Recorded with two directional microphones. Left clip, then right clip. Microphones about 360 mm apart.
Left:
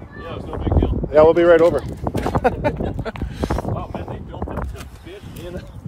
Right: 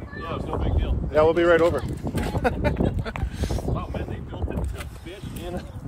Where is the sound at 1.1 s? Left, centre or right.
Left.